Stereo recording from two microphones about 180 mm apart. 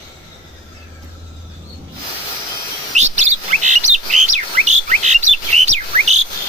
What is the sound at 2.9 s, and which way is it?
Chirp, 40° right (ahead or behind).